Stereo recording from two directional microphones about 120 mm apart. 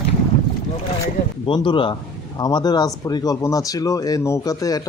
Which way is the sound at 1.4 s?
40° left (ahead or behind).